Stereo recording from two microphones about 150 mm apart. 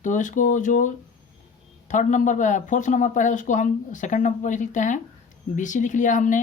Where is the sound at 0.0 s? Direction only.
60° left (ahead or behind).